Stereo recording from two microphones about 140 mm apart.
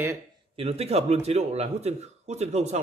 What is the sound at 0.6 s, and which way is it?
A man's voice, 45° right (ahead or behind).